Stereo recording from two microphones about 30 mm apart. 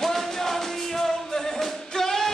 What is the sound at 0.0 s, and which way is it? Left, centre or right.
Music, centre.